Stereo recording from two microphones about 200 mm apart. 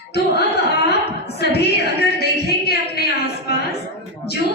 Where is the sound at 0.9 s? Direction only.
55° left (ahead or behind).